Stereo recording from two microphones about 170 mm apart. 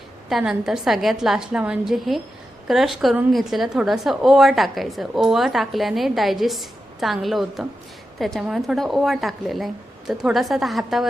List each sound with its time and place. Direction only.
0.3 s a woman's voice: centre (ahead or behind)